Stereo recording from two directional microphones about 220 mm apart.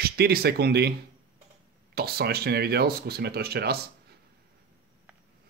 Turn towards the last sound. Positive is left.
turn(degrees=-45)  # may be behind; listen again after turning